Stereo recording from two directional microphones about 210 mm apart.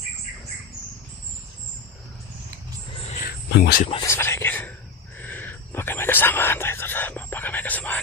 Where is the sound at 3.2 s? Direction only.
50° left (ahead or behind).